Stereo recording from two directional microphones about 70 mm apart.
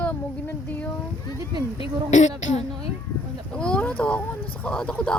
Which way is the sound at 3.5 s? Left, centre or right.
Centre.